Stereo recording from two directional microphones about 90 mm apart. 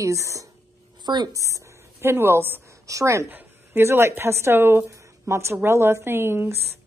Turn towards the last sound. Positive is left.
turn(degrees=-25)  # may be behind; listen again after turning